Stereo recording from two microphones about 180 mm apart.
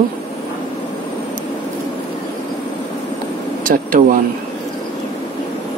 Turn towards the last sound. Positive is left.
turn(degrees=-45)  # may be behind; listen again after turning